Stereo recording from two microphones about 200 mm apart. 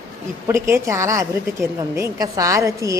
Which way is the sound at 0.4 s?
15° right (ahead or behind).